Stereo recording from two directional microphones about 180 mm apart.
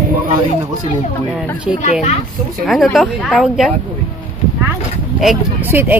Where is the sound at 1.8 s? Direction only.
40° left (ahead or behind).